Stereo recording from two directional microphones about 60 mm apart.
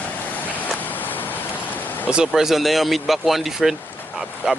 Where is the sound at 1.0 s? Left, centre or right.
Left.